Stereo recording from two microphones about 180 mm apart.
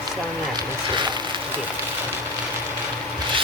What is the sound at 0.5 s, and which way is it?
Speech, 25° right (ahead or behind).